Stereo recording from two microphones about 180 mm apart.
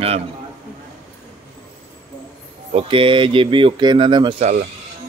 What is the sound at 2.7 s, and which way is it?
Speech, 30° right (ahead or behind).